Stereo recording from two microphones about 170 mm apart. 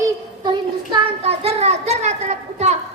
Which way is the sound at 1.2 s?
35° right (ahead or behind).